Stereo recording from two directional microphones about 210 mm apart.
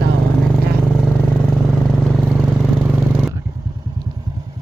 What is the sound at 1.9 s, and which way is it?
Vehicle, centre (ahead or behind).